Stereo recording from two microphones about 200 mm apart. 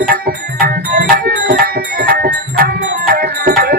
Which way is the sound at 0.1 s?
45° right (ahead or behind).